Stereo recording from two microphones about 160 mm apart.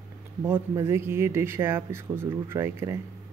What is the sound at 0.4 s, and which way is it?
Speech, 15° right (ahead or behind).